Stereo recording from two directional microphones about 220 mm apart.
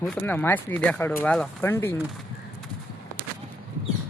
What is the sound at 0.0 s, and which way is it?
Speech, 10° left (ahead or behind).